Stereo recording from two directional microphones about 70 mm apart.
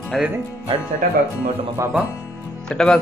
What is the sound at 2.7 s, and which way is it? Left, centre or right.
Speech, centre.